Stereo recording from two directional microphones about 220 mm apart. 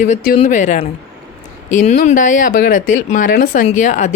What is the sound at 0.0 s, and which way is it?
Speech, 35° left (ahead or behind).